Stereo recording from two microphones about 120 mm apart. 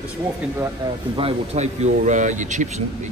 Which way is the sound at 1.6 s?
85° right.